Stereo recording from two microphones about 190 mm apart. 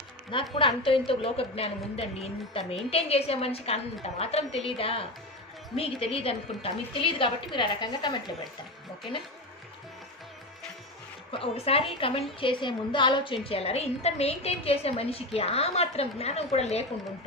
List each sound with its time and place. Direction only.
0.6 s a woman's voice: 25° left (ahead or behind)
11.3 s a woman's voice: 30° left (ahead or behind)